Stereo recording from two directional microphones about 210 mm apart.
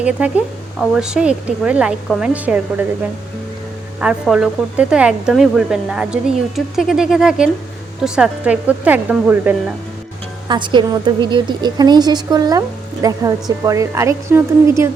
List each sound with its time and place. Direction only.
0.0 s speech: 5° right (ahead or behind)
4.0 s a woman's voice: 5° right (ahead or behind)
10.5 s a woman's voice: 20° right (ahead or behind)